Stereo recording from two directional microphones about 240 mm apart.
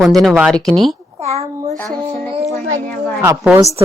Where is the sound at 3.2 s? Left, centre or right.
Centre.